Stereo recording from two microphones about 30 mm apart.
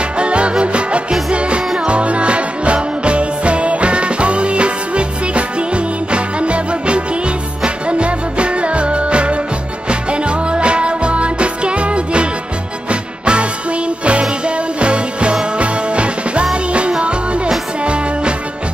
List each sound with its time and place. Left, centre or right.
0.2 s music: right